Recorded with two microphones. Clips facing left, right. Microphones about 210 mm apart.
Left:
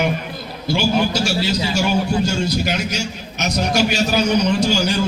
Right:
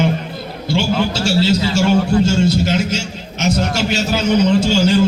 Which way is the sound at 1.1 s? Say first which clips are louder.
Right 4 dB; 25° right (ahead or behind).